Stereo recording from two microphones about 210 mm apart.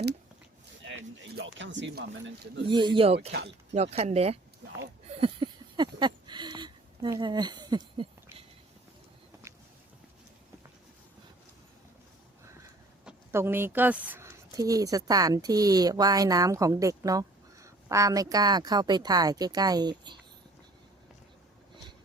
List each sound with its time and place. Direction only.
1.4 s speech: 60° right (ahead or behind)
2.6 s speech: 20° right (ahead or behind)
5.2 s a sound: 20° right (ahead or behind)
13.1 s speech: 10° right (ahead or behind)